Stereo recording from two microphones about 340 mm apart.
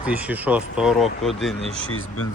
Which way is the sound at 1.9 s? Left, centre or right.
Left.